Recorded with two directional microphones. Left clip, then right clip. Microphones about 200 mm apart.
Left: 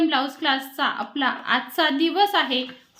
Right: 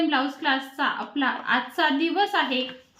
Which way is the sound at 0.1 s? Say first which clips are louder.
Left 1 dB; 40° left (ahead or behind).